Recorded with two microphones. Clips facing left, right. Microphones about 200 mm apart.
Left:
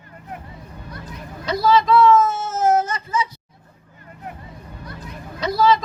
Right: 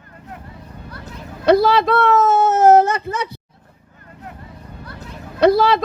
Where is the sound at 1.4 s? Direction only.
65° right (ahead or behind).